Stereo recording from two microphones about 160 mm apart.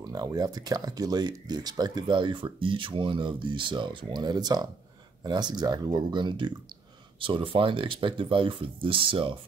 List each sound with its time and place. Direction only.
0.0 s speech: 25° right (ahead or behind)